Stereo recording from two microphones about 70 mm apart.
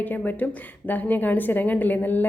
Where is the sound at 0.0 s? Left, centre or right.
Left.